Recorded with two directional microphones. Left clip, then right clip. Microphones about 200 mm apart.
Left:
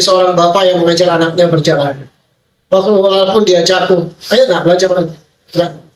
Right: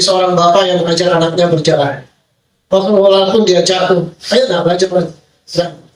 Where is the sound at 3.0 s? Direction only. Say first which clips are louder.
Even; 15° left (ahead or behind).